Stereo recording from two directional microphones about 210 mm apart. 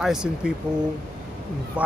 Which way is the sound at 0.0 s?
Centre (ahead or behind).